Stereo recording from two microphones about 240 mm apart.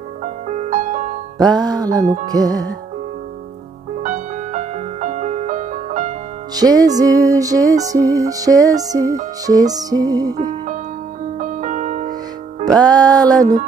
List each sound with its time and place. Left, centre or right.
0.2 s music: right
1.5 s music: centre
4.0 s music: right
6.5 s music: centre
11.3 s music: right
12.6 s music: centre